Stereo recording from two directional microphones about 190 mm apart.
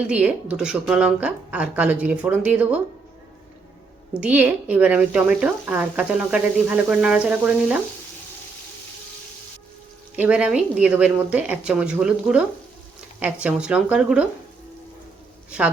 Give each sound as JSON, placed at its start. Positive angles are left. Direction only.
{"t": 0.1, "sound": "speech", "side_deg": -5}
{"t": 4.1, "sound": "speech", "side_deg": -5}
{"t": 10.2, "sound": "speech", "side_deg": -5}
{"t": 15.4, "sound": "a woman's voice", "side_deg": -5}